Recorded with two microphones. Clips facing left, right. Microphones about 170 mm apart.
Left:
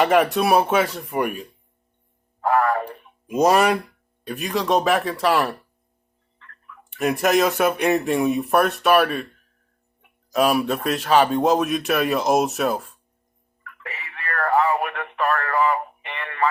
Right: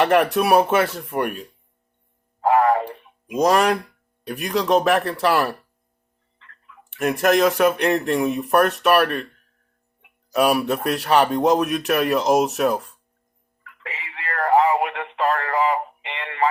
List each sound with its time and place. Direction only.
0.0 s speech: centre (ahead or behind)
2.5 s a sound: 20° right (ahead or behind)
3.4 s speech: 5° left (ahead or behind)
6.9 s speech: centre (ahead or behind)
10.3 s speech: centre (ahead or behind)
13.8 s radio: 20° right (ahead or behind)